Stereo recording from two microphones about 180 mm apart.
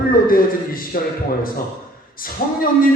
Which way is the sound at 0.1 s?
55° left (ahead or behind).